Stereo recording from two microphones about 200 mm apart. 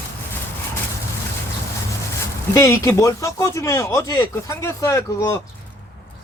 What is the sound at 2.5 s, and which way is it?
Speech, 15° left (ahead or behind).